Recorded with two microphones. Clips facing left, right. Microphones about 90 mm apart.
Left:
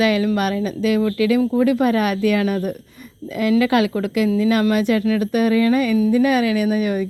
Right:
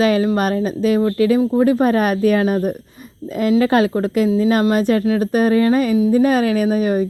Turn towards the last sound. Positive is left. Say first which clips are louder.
# right 3 dB
turn(degrees=-35)  # may be behind; listen again after turning